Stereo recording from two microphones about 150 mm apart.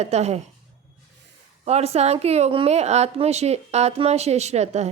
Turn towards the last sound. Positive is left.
turn(degrees=-45)  # may be behind; listen again after turning